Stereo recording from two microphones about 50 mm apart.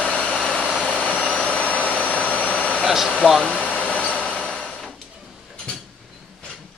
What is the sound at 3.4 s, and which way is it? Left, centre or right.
Vehicle, left.